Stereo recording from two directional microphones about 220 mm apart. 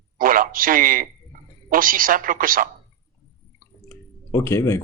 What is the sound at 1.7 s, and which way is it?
Speech, 40° right (ahead or behind).